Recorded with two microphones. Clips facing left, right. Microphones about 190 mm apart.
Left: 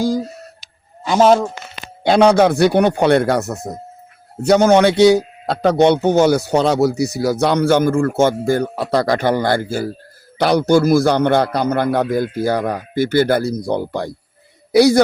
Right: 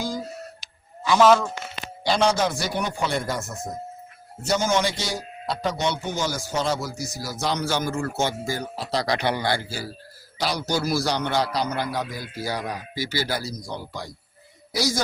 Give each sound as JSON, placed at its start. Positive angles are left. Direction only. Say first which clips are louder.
{"t": 1.1, "sound": "speech", "louder": "left 5 dB", "side_deg": 40}
{"t": 2.0, "sound": "a man's voice", "louder": "left 10 dB", "side_deg": 60}